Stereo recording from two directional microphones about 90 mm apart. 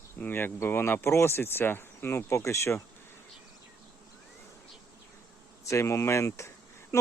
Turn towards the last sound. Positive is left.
turn(degrees=35)  # may be behind; listen again after turning